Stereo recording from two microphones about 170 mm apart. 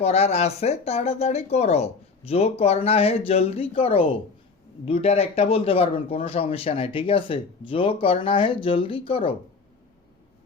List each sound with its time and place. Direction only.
0.0 s speech: 40° left (ahead or behind)